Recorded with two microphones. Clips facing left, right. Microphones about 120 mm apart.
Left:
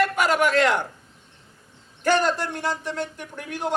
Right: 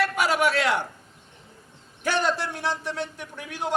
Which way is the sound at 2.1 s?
45° left (ahead or behind).